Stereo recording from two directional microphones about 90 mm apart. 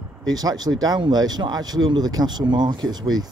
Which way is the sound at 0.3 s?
45° right (ahead or behind).